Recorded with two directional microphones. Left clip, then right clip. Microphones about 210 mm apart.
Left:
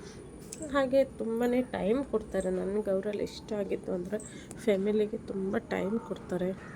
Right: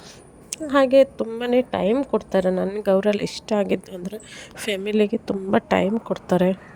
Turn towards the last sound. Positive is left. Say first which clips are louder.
# right 13 dB
turn(degrees=-45)  # may be behind; listen again after turning